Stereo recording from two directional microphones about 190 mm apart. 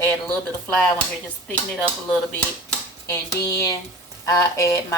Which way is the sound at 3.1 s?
15° left (ahead or behind).